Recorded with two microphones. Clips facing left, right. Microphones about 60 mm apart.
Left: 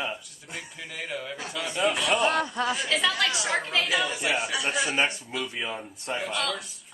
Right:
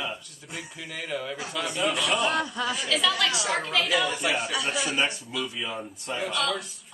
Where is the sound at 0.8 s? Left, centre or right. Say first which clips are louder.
Right 2 dB; centre.